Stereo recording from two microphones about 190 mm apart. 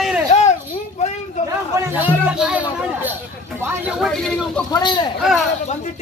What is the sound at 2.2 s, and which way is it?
Speech, 5° right (ahead or behind).